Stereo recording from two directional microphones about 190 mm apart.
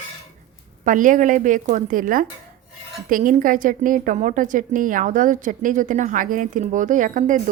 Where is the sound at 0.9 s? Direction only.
45° right (ahead or behind).